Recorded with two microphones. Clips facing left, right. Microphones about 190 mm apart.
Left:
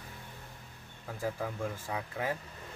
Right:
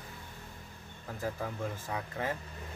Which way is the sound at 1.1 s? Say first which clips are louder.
Left 1 dB; 10° left (ahead or behind).